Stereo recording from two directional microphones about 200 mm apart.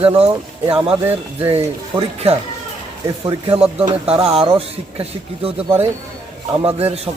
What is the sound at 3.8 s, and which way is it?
Speech, 30° right (ahead or behind).